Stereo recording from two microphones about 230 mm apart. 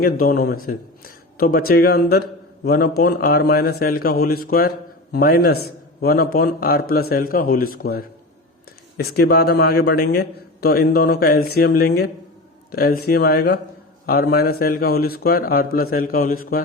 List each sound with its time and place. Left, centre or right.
0.0 s a man's voice: left